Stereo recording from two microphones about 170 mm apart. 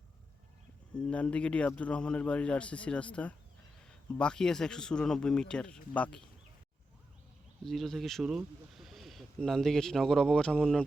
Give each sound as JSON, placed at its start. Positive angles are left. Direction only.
{"t": 0.9, "sound": "a man's voice", "side_deg": 5}
{"t": 7.6, "sound": "speech", "side_deg": 0}